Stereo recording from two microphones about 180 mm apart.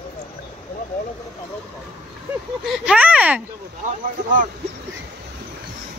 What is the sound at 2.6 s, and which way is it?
Speech, 5° right (ahead or behind).